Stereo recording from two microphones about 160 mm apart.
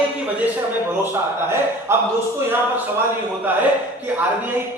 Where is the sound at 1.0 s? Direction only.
15° right (ahead or behind).